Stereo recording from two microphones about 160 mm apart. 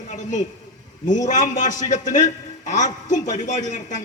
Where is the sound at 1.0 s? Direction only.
50° left (ahead or behind).